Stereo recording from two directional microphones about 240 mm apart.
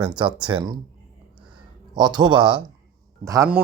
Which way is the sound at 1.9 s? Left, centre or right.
Centre.